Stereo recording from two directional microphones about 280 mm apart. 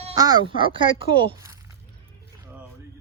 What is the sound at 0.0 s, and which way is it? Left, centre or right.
Speech, centre.